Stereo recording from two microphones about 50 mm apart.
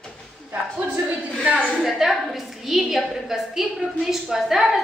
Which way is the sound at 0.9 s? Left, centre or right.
Right.